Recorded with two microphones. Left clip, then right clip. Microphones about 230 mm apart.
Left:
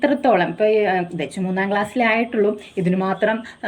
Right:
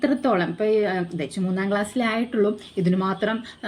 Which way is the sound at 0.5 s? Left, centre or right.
Left.